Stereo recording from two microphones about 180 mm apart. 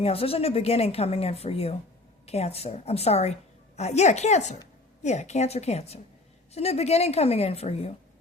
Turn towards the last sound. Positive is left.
turn(degrees=35)  # may be behind; listen again after turning